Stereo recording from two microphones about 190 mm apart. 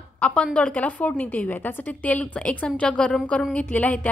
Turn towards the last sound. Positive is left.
turn(degrees=10)  # may be behind; listen again after turning